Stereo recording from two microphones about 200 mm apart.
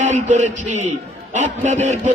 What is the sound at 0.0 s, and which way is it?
A man's voice, 35° right (ahead or behind).